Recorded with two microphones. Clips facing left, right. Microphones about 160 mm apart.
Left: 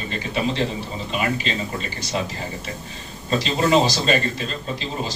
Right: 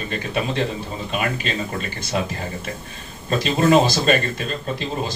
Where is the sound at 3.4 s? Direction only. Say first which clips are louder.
Right 3 dB; 55° right (ahead or behind).